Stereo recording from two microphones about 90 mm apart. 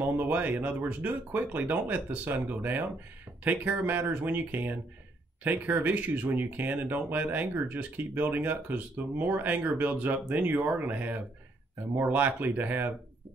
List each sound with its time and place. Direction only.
0.0 s speech: 20° right (ahead or behind)